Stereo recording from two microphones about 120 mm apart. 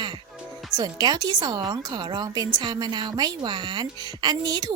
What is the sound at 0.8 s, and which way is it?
A woman's voice, 35° right (ahead or behind).